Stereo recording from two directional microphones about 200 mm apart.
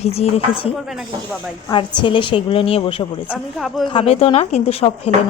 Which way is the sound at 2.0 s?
25° left (ahead or behind).